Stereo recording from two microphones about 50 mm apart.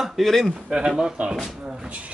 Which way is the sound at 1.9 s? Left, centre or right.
Right.